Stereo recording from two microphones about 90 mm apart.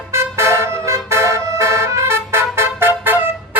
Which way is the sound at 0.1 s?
30° right (ahead or behind).